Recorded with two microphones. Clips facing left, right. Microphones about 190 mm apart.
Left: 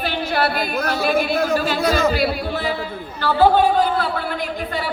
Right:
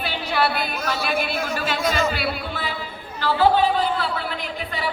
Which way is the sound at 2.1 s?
45° left (ahead or behind).